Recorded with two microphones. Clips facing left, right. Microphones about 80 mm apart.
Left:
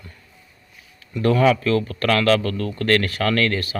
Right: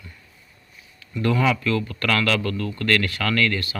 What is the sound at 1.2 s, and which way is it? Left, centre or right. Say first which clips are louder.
Speech: left 4 dB; left.